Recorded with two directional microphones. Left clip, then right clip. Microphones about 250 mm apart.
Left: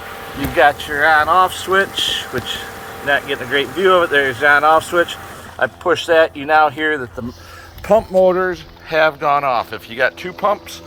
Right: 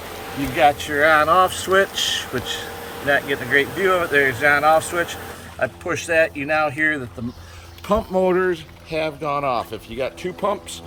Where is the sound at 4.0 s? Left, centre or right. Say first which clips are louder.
Left 3 dB; left.